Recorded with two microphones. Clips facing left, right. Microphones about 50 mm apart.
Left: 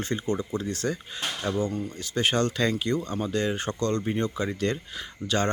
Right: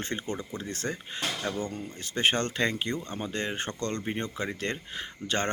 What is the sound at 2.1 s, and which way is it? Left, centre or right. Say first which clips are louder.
Speech: left 2 dB; right.